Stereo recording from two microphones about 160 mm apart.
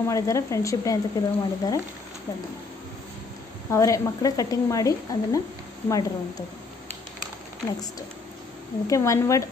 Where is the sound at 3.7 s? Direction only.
20° left (ahead or behind).